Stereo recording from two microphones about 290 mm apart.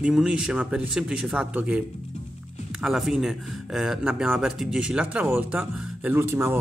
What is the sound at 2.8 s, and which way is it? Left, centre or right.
Speech, centre.